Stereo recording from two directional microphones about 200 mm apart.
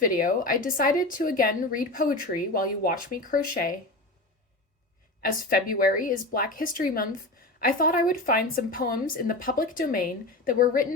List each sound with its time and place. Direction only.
0.0 s a woman's voice: 45° left (ahead or behind)
5.2 s a woman's voice: 45° left (ahead or behind)